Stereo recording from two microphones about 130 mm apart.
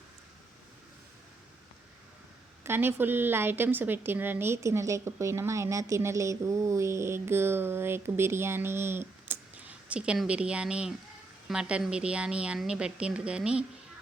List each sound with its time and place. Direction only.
2.6 s a woman's voice: 15° right (ahead or behind)